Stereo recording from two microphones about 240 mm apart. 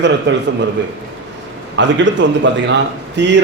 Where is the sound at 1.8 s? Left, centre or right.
Right.